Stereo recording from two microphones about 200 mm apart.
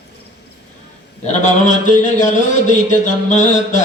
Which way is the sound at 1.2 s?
40° left (ahead or behind).